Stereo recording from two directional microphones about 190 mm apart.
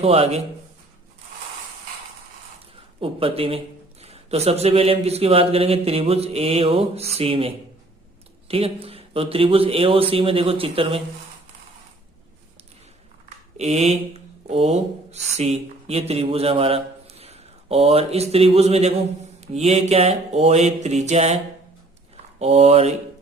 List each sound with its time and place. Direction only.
0.0 s speech: 35° right (ahead or behind)
3.0 s a man's voice: 30° right (ahead or behind)
13.6 s speech: 35° right (ahead or behind)
22.4 s speech: 35° right (ahead or behind)